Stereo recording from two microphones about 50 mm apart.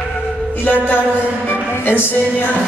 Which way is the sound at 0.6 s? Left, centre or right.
Left.